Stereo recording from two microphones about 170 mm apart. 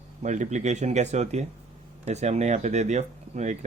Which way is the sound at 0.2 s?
45° right (ahead or behind).